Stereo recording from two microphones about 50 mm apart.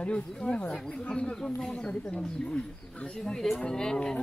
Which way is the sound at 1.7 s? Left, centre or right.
Left.